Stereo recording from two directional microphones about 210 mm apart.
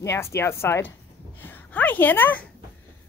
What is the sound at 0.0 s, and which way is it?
A woman's voice, 15° left (ahead or behind).